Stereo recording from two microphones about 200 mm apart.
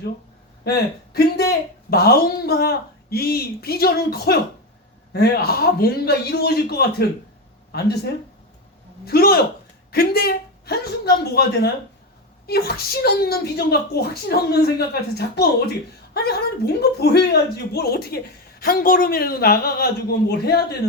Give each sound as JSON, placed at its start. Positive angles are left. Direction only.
{"t": 0.6, "sound": "speech", "side_deg": 50}
{"t": 16.1, "sound": "speech", "side_deg": 50}